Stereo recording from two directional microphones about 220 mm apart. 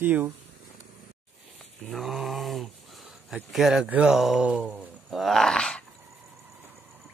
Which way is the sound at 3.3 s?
Centre (ahead or behind).